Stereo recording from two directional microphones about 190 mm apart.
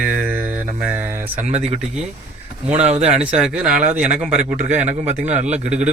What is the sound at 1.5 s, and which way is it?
Speech, 35° right (ahead or behind).